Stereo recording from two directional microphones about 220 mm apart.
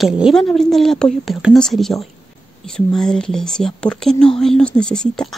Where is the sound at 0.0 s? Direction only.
Centre (ahead or behind).